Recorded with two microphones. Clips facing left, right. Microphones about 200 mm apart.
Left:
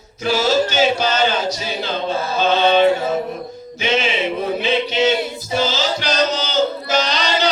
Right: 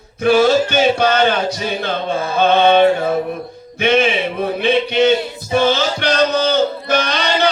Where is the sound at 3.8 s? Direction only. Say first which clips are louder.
Right 5 dB; 55° right (ahead or behind).